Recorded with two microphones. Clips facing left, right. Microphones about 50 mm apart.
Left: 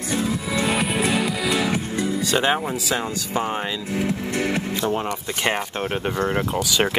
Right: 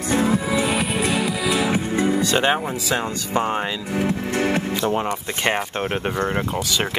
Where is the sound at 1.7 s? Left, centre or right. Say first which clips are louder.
Right 3 dB; right.